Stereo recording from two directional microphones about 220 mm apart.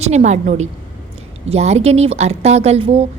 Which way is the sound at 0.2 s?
35° right (ahead or behind).